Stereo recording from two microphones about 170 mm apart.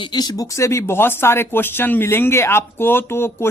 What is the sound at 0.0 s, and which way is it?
Speech, 25° left (ahead or behind).